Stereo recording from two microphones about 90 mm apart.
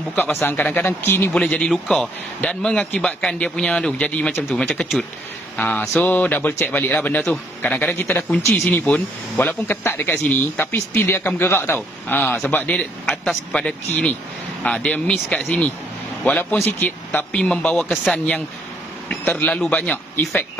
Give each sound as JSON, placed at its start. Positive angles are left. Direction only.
{"t": 0.1, "sound": "speech", "side_deg": 25}
{"t": 1.3, "sound": "a man's voice", "side_deg": 10}
{"t": 5.6, "sound": "a man's voice", "side_deg": 15}